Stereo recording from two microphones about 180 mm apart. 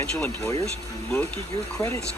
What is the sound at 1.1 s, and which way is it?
Speech, 10° left (ahead or behind).